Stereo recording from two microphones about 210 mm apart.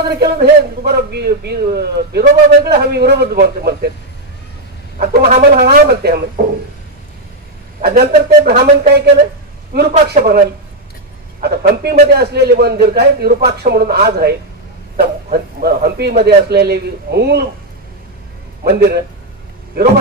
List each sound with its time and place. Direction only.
0.2 s a man's voice: 50° right (ahead or behind)
5.6 s a man's voice: 50° right (ahead or behind)
7.8 s a man's voice: 50° right (ahead or behind)
11.4 s a man's voice: 50° right (ahead or behind)
15.3 s a man's voice: 50° right (ahead or behind)
18.6 s a man's voice: 50° right (ahead or behind)